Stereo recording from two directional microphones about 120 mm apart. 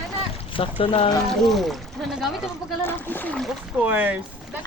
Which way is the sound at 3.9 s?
15° right (ahead or behind).